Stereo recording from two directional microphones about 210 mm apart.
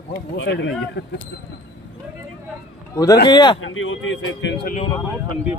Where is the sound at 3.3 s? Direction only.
20° left (ahead or behind).